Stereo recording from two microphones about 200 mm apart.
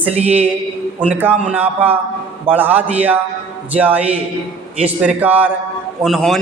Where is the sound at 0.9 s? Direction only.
10° right (ahead or behind).